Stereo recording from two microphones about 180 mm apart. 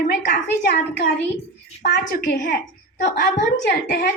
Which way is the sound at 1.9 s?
65° left (ahead or behind).